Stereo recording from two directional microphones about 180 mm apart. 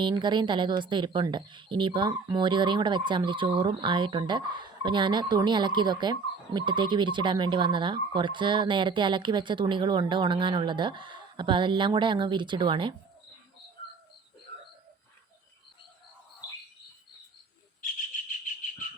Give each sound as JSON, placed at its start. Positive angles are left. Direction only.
{"t": 0.0, "sound": "speech", "side_deg": -25}